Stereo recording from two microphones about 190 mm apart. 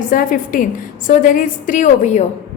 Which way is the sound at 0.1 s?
45° left (ahead or behind).